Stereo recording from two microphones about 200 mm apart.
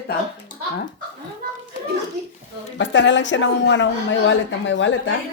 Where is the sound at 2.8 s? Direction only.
65° left (ahead or behind).